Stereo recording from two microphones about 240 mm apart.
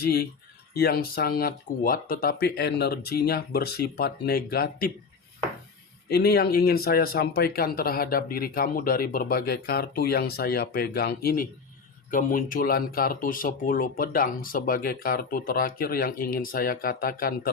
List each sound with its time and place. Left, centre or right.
0.0 s speech: left
6.1 s speech: left